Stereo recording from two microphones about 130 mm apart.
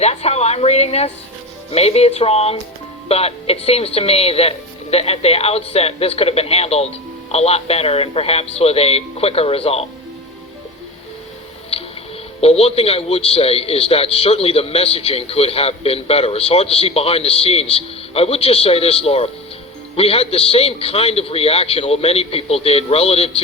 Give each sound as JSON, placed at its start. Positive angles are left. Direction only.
{"t": 0.0, "sound": "a man's voice", "side_deg": 55}
{"t": 12.4, "sound": "a man's voice", "side_deg": 50}